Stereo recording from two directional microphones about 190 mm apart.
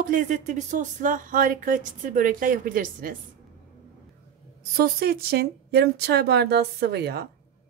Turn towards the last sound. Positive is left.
turn(degrees=-60)  # may be behind; listen again after turning